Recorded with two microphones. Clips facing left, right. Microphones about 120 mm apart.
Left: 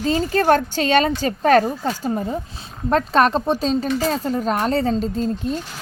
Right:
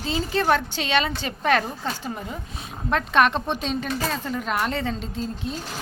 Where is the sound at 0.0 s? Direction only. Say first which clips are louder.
Left 6 dB; 45° left (ahead or behind).